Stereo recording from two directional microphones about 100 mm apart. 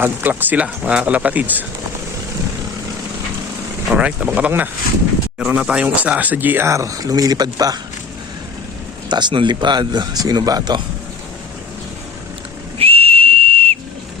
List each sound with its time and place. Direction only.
0.0 s speech: 20° right (ahead or behind)
3.8 s speech: 10° right (ahead or behind); by 7.8 s 40° right (ahead or behind)
9.0 s speech: 50° right (ahead or behind)
12.8 s whistle: 80° right